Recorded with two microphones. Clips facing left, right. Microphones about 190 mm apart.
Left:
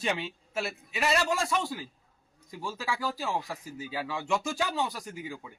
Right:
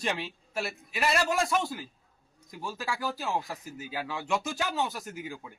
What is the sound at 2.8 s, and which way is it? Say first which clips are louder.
Speech: left 1 dB; centre (ahead or behind).